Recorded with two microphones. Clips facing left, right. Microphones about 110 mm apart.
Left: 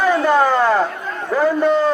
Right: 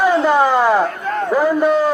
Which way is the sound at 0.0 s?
15° right (ahead or behind).